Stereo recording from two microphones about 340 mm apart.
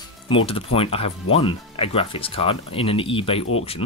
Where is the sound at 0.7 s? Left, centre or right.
Centre.